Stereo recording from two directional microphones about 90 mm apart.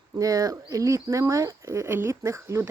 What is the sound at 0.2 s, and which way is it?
Speech, 40° right (ahead or behind).